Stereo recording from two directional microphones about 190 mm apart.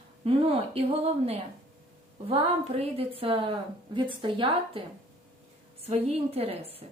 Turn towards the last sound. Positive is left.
turn(degrees=-30)  # may be behind; listen again after turning